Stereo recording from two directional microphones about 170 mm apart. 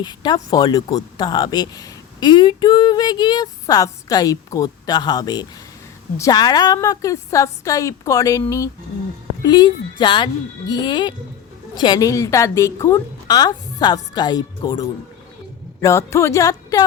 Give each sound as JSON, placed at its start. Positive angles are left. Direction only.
{"t": 0.0, "sound": "speech", "side_deg": 25}